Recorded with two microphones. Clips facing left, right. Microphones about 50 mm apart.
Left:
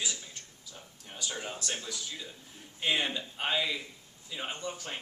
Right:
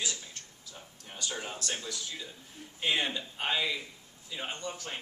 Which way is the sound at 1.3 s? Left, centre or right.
Centre.